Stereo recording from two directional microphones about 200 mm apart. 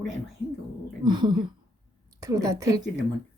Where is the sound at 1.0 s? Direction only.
20° right (ahead or behind).